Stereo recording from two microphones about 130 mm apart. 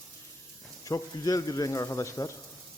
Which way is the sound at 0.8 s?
25° left (ahead or behind).